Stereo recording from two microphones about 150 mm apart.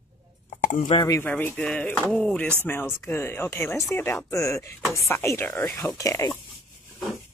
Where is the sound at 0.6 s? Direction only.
60° left (ahead or behind).